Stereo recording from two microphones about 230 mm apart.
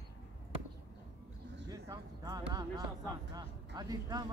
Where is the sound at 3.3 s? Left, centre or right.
Centre.